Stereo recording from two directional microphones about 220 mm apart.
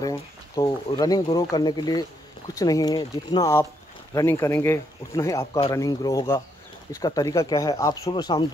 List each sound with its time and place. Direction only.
0.6 s speech: 15° left (ahead or behind)